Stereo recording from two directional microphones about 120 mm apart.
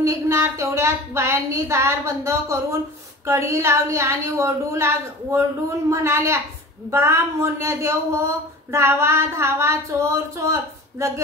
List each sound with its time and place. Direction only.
0.0 s a woman's voice: 25° right (ahead or behind)